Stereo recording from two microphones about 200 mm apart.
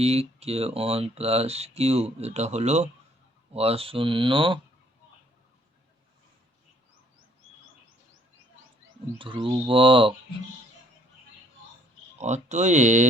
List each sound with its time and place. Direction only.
0.0 s speech: 30° right (ahead or behind)
9.1 s speech: 25° right (ahead or behind)
12.2 s speech: 35° right (ahead or behind)